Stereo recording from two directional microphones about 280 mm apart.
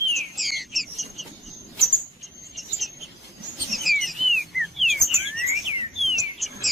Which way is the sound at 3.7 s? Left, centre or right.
Centre.